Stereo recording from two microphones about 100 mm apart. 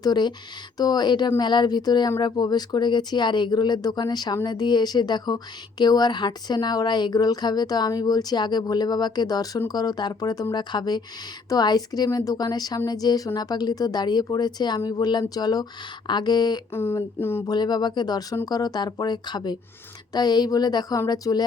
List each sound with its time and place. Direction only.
0.0 s a woman's voice: 45° left (ahead or behind)
16.7 s speech: 25° left (ahead or behind)
17.4 s a woman's voice: 45° left (ahead or behind)